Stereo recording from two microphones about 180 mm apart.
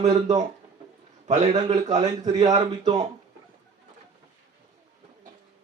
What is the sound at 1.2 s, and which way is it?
Speech, 40° right (ahead or behind).